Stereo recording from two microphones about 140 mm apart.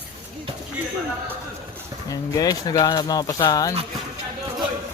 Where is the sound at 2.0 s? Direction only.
25° left (ahead or behind).